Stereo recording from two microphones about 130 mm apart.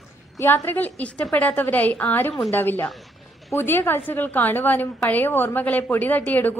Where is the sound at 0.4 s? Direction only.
15° left (ahead or behind).